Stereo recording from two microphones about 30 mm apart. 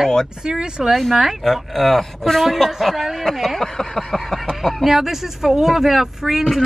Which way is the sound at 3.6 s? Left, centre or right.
Centre.